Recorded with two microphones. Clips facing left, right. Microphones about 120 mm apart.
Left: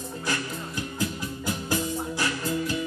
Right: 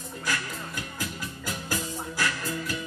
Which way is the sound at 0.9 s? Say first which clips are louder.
Left 5 dB; 25° left (ahead or behind).